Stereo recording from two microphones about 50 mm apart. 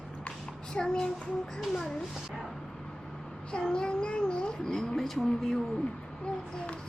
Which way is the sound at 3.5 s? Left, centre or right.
Centre.